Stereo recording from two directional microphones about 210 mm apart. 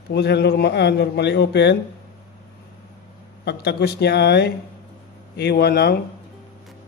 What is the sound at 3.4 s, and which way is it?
A man's voice, 50° left (ahead or behind).